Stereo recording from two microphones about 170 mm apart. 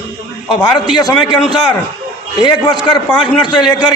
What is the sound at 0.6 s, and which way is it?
A man's voice, 25° left (ahead or behind).